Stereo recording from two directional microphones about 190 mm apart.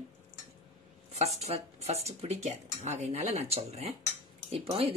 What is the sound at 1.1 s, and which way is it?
Speech, 35° right (ahead or behind).